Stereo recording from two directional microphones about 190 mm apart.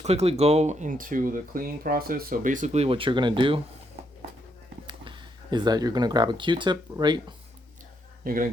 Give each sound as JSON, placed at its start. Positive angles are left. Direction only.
{"t": 0.0, "sound": "speech", "side_deg": -35}
{"t": 4.9, "sound": "speech", "side_deg": -25}
{"t": 8.2, "sound": "speech", "side_deg": -50}